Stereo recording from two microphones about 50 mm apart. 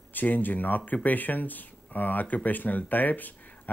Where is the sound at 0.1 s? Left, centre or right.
Left.